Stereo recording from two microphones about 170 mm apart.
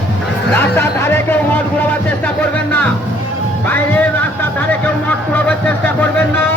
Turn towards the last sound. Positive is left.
turn(degrees=10)  # may be behind; listen again after turning